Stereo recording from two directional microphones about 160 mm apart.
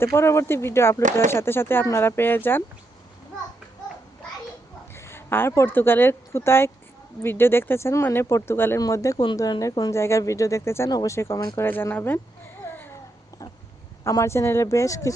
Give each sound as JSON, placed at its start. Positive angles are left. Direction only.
{"t": 0.0, "sound": "speech", "side_deg": 15}
{"t": 4.9, "sound": "speech", "side_deg": 15}
{"t": 14.0, "sound": "speech", "side_deg": 20}